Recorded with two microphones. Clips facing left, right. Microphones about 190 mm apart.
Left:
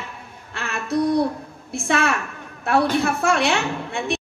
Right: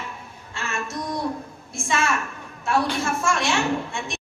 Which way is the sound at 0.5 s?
60° left (ahead or behind).